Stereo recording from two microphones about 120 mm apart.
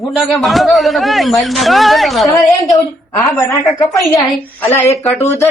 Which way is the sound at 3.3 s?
25° left (ahead or behind).